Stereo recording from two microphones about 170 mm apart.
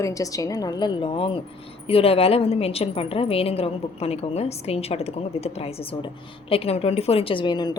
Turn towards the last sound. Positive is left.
turn(degrees=25)  # may be behind; listen again after turning